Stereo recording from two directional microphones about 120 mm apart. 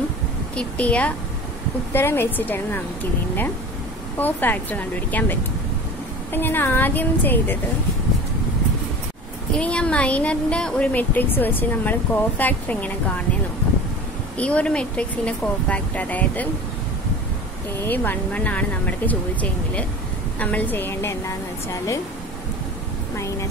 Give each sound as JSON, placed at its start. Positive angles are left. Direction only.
{"t": 0.6, "sound": "speech", "side_deg": 10}
{"t": 9.6, "sound": "speech", "side_deg": 10}
{"t": 14.4, "sound": "speech", "side_deg": 10}
{"t": 17.7, "sound": "speech", "side_deg": 15}
{"t": 23.1, "sound": "a sound", "side_deg": 25}